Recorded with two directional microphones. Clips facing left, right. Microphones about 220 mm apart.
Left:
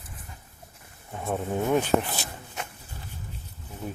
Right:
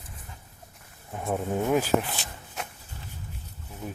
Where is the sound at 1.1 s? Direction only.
5° right (ahead or behind).